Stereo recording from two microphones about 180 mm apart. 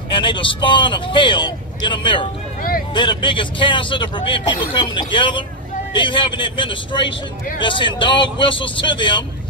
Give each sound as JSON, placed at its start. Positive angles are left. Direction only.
{"t": 0.1, "sound": "speech", "side_deg": 25}